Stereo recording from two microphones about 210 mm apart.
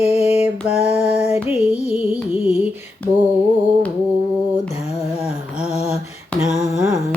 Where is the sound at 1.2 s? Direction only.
30° left (ahead or behind).